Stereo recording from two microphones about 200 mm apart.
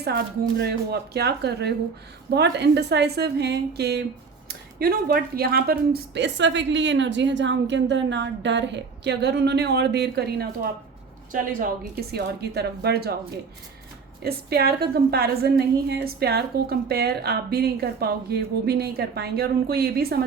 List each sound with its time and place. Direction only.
0.6 s a woman's voice: 55° right (ahead or behind)
14.3 s a woman's voice: 50° right (ahead or behind)